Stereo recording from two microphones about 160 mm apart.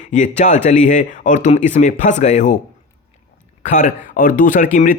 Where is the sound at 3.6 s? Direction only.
55° left (ahead or behind).